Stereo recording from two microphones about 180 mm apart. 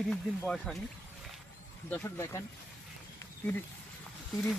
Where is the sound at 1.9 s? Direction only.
10° left (ahead or behind).